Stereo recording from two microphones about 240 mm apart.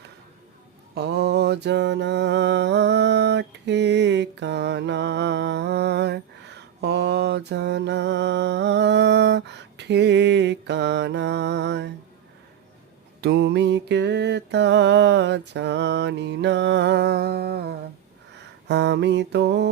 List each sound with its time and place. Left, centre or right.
0.9 s mantra: right
13.2 s mantra: right
18.3 s a sound: right